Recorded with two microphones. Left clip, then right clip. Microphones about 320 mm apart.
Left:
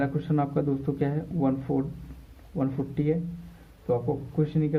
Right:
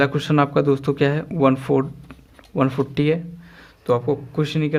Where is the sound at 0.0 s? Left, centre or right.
Right.